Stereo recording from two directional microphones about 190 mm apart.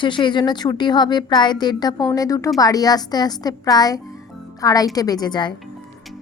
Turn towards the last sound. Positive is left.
turn(degrees=20)  # may be behind; listen again after turning